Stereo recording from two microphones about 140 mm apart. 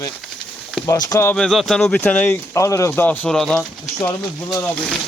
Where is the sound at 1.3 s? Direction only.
5° left (ahead or behind).